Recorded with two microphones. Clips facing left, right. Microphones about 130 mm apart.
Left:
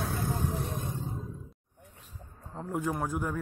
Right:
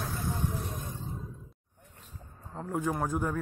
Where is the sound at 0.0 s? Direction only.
60° left (ahead or behind).